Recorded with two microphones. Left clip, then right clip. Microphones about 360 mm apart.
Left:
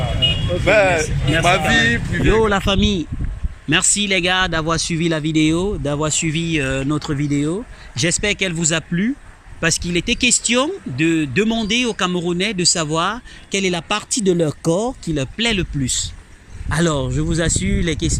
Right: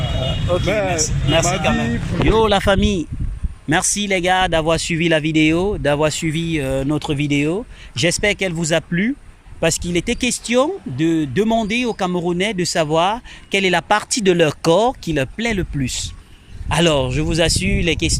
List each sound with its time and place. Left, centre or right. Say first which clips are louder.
0.7 s speech: left 10 dB; left
2.3 s speech: right 1 dB; centre
2.6 s speech: right 2 dB; right